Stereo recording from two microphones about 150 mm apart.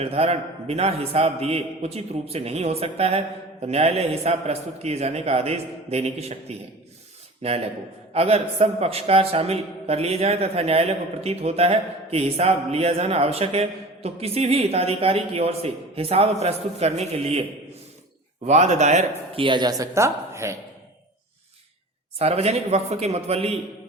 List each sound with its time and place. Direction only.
0.0 s a man's voice: 45° right (ahead or behind)
19.4 s speech: 30° right (ahead or behind)
22.2 s a man's voice: 45° right (ahead or behind)